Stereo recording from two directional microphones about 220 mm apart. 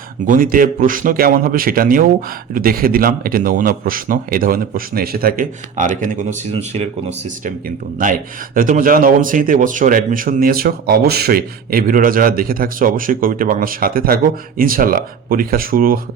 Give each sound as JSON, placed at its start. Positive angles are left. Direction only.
{"t": 0.3, "sound": "a man's voice", "side_deg": -40}